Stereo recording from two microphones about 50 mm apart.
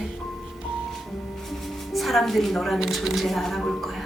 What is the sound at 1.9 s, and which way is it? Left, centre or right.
Speech, centre.